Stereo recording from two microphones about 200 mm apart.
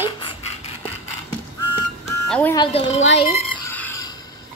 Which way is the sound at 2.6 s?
30° left (ahead or behind).